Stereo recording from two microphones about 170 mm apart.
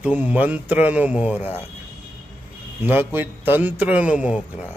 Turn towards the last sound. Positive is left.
turn(degrees=-10)  # may be behind; listen again after turning